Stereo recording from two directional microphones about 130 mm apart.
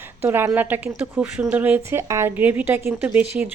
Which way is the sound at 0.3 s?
20° right (ahead or behind).